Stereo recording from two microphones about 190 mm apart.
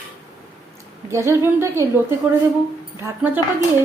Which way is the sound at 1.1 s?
15° right (ahead or behind).